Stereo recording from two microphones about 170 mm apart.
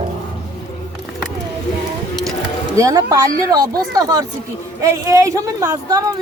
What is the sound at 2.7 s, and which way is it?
Speech, 20° right (ahead or behind).